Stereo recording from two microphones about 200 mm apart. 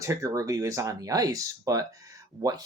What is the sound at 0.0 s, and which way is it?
Speech, 15° right (ahead or behind).